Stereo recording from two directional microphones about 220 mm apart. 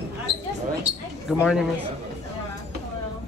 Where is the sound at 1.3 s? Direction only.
5° right (ahead or behind).